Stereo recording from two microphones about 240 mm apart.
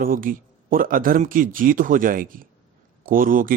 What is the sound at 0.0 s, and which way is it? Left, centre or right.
Speech, right.